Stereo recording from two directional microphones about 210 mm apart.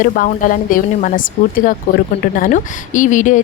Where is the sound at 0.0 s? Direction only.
40° left (ahead or behind).